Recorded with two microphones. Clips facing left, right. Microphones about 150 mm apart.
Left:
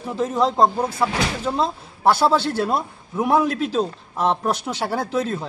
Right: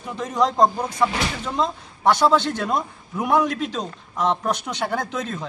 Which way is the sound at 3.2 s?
30° left (ahead or behind).